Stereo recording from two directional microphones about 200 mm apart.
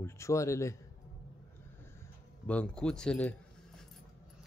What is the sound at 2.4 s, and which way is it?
Speech, 5° left (ahead or behind).